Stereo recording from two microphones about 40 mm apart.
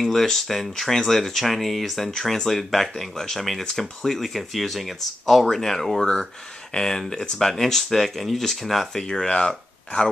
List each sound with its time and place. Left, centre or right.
0.0 s speech: centre
8.9 s speech: centre
9.3 s speech: left